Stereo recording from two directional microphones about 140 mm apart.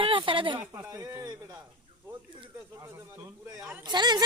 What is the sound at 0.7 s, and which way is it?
Speech, 25° right (ahead or behind).